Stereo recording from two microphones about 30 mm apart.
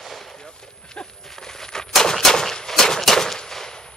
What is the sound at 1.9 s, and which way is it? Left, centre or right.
Gunshot, centre.